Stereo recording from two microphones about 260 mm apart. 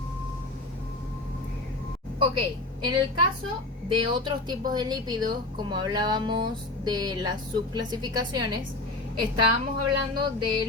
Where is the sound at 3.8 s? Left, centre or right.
Centre.